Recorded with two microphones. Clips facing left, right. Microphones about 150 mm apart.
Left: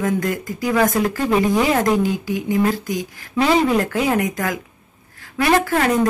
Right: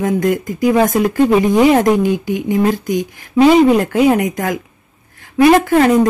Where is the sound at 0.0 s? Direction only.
20° right (ahead or behind).